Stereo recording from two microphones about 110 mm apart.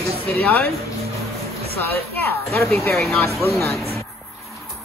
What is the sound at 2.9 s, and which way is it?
Speech, 5° left (ahead or behind).